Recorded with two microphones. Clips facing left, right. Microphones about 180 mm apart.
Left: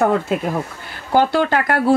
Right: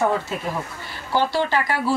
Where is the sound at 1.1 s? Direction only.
50° left (ahead or behind).